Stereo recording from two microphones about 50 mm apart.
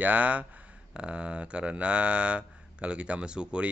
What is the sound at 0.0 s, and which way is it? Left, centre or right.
Speech, right.